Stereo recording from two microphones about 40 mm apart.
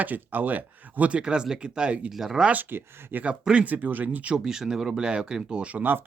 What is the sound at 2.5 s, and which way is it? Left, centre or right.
Speech, right.